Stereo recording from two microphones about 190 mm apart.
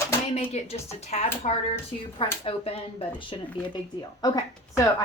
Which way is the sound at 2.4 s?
30° left (ahead or behind).